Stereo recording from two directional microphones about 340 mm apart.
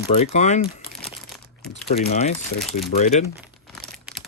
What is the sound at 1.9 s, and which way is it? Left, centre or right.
Speech, centre.